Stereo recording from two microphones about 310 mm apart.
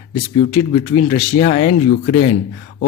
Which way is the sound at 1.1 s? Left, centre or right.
Centre.